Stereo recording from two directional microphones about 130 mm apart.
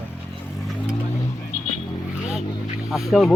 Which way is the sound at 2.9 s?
Centre (ahead or behind).